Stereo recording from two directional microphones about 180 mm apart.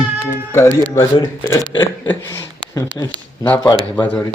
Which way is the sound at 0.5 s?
15° left (ahead or behind).